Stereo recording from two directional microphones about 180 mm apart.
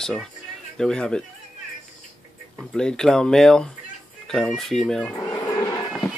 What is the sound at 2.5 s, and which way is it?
Speech, 5° left (ahead or behind).